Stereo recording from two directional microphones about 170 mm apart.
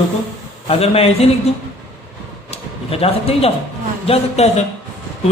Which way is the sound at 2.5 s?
35° left (ahead or behind).